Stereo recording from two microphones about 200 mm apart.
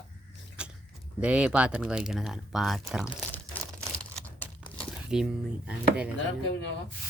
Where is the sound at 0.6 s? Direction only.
5° right (ahead or behind).